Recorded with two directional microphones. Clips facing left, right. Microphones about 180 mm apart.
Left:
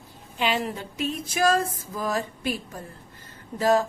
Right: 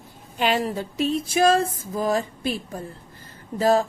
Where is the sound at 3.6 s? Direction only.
30° right (ahead or behind).